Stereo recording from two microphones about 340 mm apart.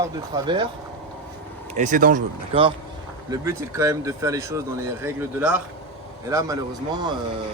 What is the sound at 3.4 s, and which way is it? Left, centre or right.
Speech, centre.